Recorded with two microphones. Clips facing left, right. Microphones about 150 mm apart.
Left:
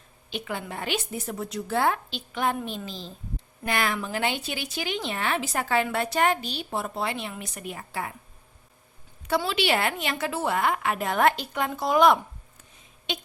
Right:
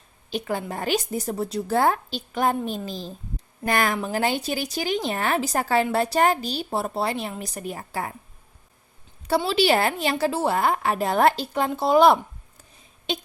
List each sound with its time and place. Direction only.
0.3 s speech: 40° right (ahead or behind)
9.4 s speech: 35° right (ahead or behind)